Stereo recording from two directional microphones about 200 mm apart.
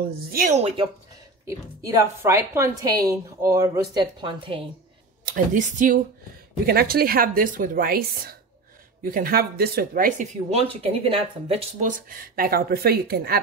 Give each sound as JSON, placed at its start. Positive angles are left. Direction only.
{"t": 0.0, "sound": "speech", "side_deg": -45}
{"t": 1.5, "sound": "a woman's voice", "side_deg": -15}
{"t": 5.3, "sound": "speech", "side_deg": -40}
{"t": 6.6, "sound": "a woman's voice", "side_deg": -50}
{"t": 11.9, "sound": "a woman's voice", "side_deg": -45}